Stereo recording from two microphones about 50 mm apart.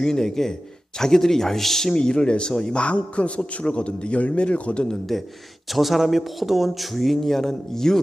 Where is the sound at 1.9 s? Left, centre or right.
Centre.